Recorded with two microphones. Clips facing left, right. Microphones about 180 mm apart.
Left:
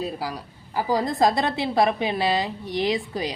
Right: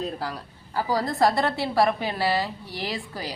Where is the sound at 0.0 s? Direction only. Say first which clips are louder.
Left 1 dB; 10° left (ahead or behind).